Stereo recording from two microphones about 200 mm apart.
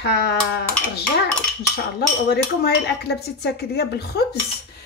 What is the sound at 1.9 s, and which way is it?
Speech, 55° left (ahead or behind).